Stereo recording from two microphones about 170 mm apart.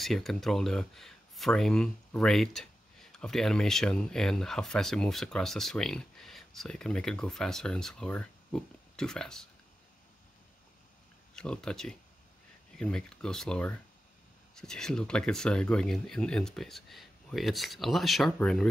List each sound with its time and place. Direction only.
0.0 s speech: centre (ahead or behind)
11.3 s speech: 5° left (ahead or behind)